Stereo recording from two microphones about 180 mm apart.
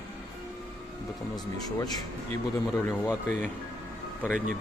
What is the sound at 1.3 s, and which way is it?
Speech, 20° left (ahead or behind).